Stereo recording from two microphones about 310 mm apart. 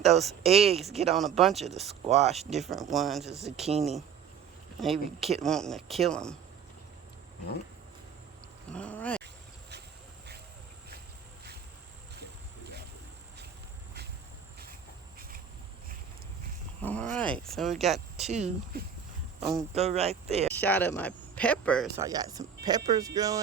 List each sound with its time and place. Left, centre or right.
0.1 s speech: centre
0.4 s speech: centre
1.1 s speech: centre
2.0 s speech: right
2.6 s speech: centre
8.7 s speech: centre
9.2 s insect: right
16.8 s speech: centre
19.7 s speech: centre
20.5 s speech: centre
21.9 s speech: centre